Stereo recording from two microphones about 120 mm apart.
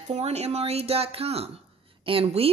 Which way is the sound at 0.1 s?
65° right (ahead or behind).